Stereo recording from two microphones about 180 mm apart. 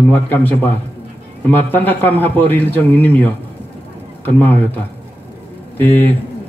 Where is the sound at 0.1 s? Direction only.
10° left (ahead or behind).